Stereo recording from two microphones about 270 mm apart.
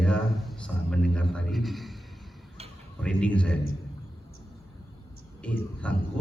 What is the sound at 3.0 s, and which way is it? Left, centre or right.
Speech, centre.